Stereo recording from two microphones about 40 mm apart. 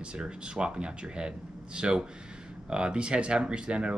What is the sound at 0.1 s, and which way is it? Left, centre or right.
Speech, right.